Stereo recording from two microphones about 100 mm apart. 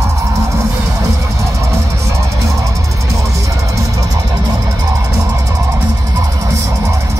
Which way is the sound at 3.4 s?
35° right (ahead or behind).